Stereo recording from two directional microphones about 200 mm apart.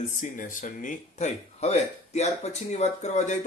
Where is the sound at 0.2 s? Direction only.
40° left (ahead or behind).